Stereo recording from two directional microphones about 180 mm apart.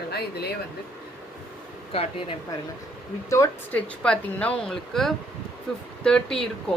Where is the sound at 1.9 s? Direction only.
35° left (ahead or behind).